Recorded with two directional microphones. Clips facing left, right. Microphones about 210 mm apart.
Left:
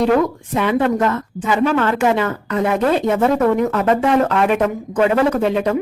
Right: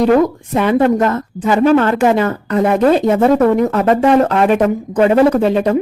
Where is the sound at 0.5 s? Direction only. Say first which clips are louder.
Right 4 dB; 40° right (ahead or behind).